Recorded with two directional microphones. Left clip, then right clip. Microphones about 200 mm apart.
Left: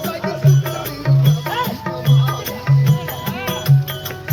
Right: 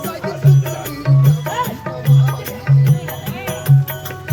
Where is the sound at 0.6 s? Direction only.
Centre (ahead or behind).